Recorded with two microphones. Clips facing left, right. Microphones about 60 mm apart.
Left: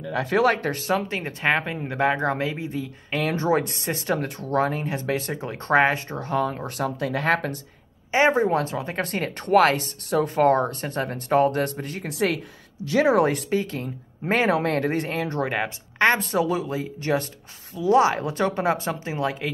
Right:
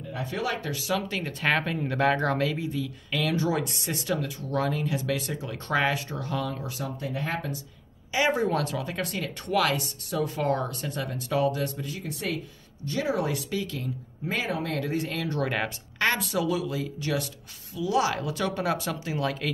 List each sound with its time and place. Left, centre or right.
0.1 s speech: left
0.9 s speech: left
4.3 s speech: left
4.6 s speech: left
7.0 s speech: left
8.1 s speech: left
11.6 s speech: left
12.1 s speech: left
13.5 s speech: left
14.3 s speech: left
15.0 s speech: left